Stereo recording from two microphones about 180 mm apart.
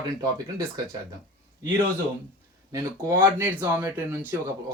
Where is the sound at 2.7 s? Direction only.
15° right (ahead or behind).